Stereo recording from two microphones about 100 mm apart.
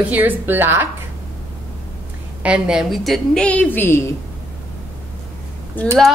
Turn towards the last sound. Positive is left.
turn(degrees=15)  # may be behind; listen again after turning